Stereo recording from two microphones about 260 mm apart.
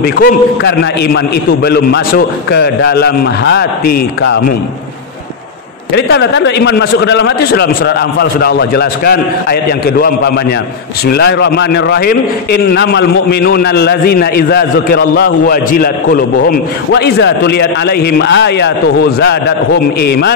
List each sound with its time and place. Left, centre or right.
0.0 s a man's voice: left
5.9 s a man's voice: left
20.0 s a man's voice: left